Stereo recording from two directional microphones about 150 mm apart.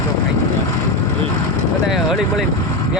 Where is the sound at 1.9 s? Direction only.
Centre (ahead or behind).